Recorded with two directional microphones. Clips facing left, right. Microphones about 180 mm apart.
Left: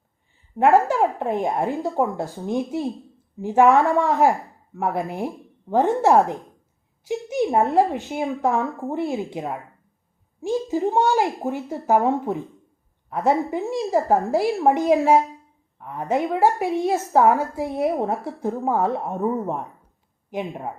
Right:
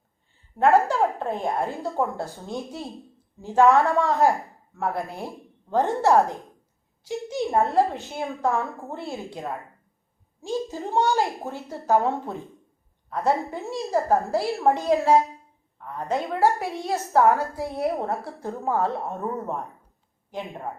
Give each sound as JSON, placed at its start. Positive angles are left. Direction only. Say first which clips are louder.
{"t": 0.9, "sound": "a woman's voice", "louder": "left 3 dB", "side_deg": 15}
{"t": 10.7, "sound": "a woman's voice", "louder": "left 4 dB", "side_deg": 15}